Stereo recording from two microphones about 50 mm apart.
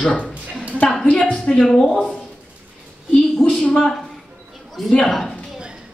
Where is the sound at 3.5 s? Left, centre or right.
Centre.